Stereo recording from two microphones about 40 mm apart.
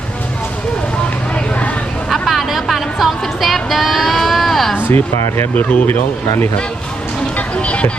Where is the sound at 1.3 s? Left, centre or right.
Left.